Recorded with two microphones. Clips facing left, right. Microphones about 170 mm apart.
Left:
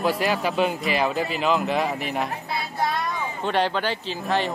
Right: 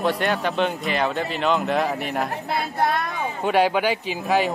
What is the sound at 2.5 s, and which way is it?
Child singing, 60° right (ahead or behind).